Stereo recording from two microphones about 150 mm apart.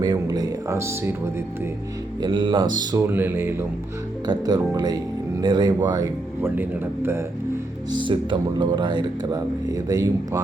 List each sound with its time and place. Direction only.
0.0 s speech: 25° right (ahead or behind)
2.2 s speech: 30° right (ahead or behind)
3.1 s a man's voice: 15° right (ahead or behind)
4.3 s speech: 25° right (ahead or behind)
6.4 s a man's voice: 15° right (ahead or behind)
7.9 s speech: 30° right (ahead or behind)